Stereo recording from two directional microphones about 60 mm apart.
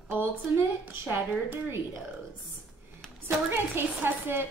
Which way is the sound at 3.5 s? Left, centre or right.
Right.